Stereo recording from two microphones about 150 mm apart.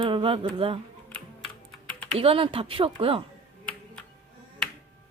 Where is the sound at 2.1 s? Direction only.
40° right (ahead or behind).